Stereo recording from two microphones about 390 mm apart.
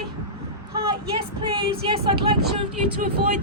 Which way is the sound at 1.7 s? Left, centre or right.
Centre.